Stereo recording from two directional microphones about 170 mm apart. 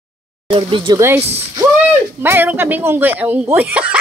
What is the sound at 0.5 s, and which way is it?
Speech, 30° right (ahead or behind).